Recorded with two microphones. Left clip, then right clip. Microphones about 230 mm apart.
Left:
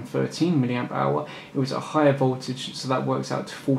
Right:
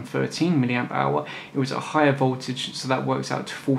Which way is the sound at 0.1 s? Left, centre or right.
Centre.